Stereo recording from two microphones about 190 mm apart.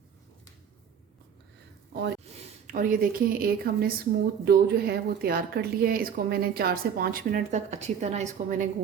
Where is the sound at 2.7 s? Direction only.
45° right (ahead or behind).